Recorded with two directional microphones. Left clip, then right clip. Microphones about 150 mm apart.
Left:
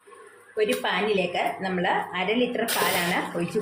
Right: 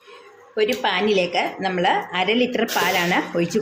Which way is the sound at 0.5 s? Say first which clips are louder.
Right 4 dB; 90° right.